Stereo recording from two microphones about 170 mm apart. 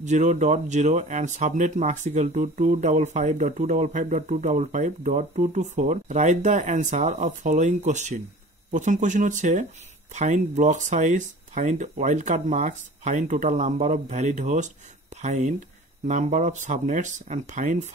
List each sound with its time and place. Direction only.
0.0 s speech: 45° right (ahead or behind)